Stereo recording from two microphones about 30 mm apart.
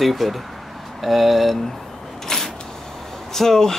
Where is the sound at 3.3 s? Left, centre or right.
Centre.